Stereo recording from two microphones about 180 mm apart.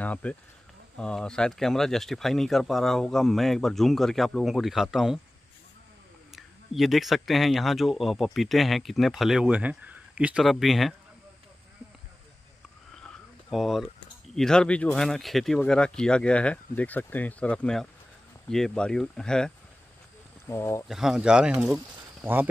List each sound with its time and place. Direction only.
0.0 s speech: 5° left (ahead or behind)
6.3 s speech: centre (ahead or behind)
12.9 s a sound: 5° left (ahead or behind)
14.3 s speech: 5° left (ahead or behind)
20.4 s speech: 15° left (ahead or behind)
20.9 s speech: centre (ahead or behind)